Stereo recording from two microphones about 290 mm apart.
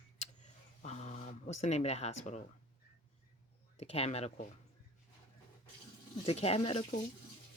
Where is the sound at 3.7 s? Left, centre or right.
Left.